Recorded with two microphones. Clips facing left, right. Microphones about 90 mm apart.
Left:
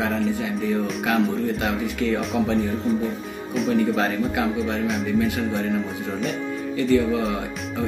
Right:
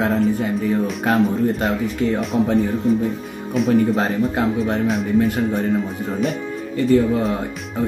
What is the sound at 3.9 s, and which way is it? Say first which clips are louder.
Speech: right 3 dB; 35° right (ahead or behind).